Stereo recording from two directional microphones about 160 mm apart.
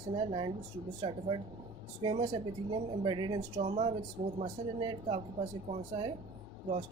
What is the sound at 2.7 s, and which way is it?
Speech, 30° right (ahead or behind).